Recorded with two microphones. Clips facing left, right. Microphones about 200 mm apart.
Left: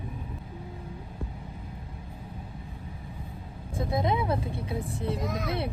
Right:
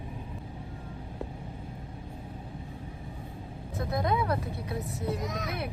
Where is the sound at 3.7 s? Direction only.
25° left (ahead or behind).